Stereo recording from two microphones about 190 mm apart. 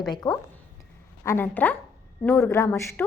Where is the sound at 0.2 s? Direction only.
20° left (ahead or behind).